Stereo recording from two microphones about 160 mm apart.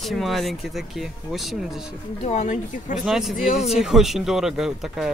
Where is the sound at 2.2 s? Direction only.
50° left (ahead or behind).